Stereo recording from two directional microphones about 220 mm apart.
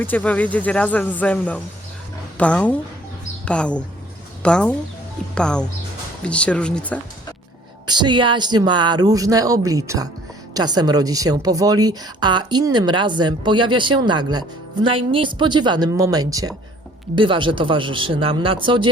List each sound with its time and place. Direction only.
0.0 s speech: 5° left (ahead or behind)
7.9 s a woman's voice: 20° right (ahead or behind)